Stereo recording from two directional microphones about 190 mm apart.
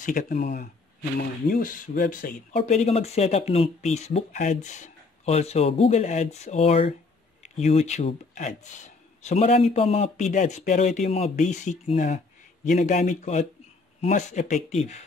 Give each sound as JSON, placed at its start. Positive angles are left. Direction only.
{"t": 0.0, "sound": "speech", "side_deg": 45}